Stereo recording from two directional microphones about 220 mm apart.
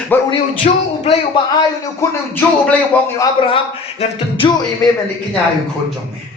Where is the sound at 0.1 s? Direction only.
10° left (ahead or behind).